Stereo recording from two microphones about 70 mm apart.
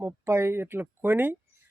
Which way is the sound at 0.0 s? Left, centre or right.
Right.